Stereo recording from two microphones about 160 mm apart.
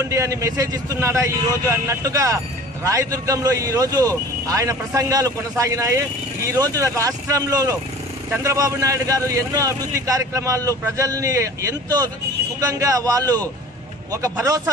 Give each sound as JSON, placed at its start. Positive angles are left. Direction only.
{"t": 0.1, "sound": "a man's voice", "side_deg": -20}